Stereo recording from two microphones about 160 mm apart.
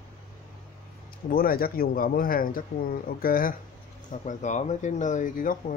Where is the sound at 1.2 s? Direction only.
65° left (ahead or behind).